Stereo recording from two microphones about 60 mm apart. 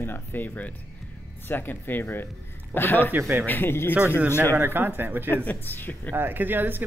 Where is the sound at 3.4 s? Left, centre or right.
Left.